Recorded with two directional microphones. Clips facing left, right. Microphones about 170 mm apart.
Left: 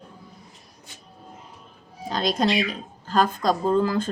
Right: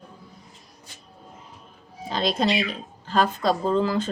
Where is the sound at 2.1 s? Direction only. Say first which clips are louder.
Even; 45° left (ahead or behind).